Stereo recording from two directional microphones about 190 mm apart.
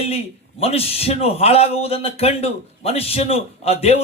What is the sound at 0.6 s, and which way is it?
A man's voice, 30° left (ahead or behind).